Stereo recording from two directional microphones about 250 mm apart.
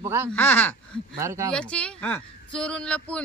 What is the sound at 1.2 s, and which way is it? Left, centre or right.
Speech, centre.